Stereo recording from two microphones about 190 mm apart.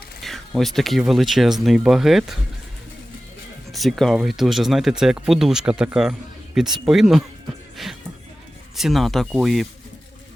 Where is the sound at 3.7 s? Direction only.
Centre (ahead or behind).